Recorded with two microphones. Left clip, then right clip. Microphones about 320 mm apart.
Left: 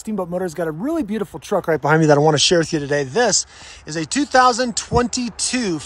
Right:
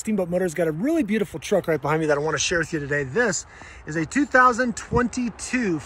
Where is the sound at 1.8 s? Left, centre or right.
Left.